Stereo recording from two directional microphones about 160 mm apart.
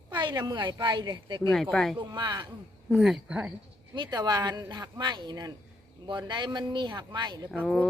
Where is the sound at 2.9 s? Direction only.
Centre (ahead or behind).